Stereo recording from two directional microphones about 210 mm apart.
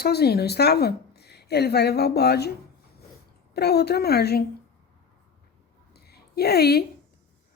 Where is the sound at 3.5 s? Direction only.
50° left (ahead or behind).